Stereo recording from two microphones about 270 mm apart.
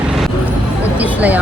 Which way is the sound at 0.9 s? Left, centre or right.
Centre.